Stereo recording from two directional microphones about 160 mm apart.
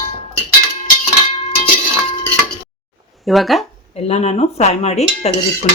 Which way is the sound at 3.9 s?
45° left (ahead or behind).